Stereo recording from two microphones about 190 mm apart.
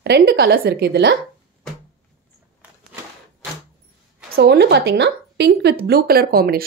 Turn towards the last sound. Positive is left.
turn(degrees=-50)  # may be behind; listen again after turning